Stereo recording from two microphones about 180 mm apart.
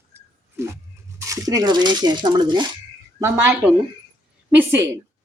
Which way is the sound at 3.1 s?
15° right (ahead or behind).